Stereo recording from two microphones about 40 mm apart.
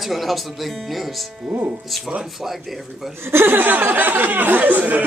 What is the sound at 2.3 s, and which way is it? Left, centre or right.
Speech, centre.